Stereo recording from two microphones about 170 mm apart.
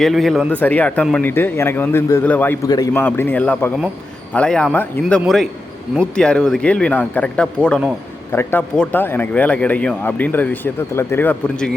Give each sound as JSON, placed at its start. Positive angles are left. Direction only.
{"t": 0.0, "sound": "a man's voice", "side_deg": 0}
{"t": 2.6, "sound": "a man's voice", "side_deg": 25}
{"t": 2.9, "sound": "a man's voice", "side_deg": 10}